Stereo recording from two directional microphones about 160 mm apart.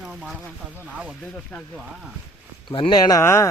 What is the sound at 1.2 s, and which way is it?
Speech, 5° left (ahead or behind).